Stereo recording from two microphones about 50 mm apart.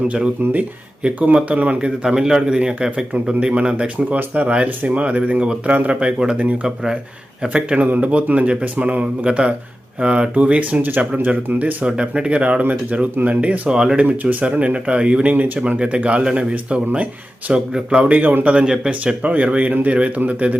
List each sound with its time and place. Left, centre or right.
1.0 s speech: right
2.0 s a man's voice: centre
3.9 s speech: right
4.4 s speech: right
11.6 s speech: right
13.7 s a man's voice: centre
14.0 s speech: right
15.3 s speech: right
16.0 s speech: right
18.1 s speech: right